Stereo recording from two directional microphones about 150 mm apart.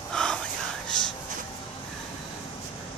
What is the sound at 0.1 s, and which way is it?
Whispering, 5° left (ahead or behind).